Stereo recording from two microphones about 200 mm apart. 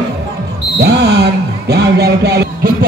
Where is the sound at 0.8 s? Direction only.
55° right (ahead or behind).